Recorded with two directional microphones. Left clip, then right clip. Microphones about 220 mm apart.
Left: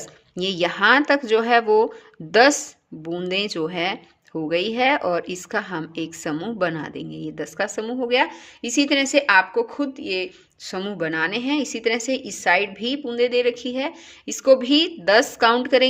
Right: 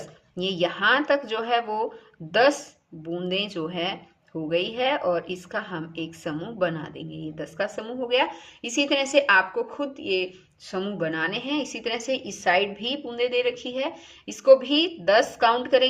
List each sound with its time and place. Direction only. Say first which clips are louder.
0.3 s a woman's voice: left 3 dB; 45° left (ahead or behind)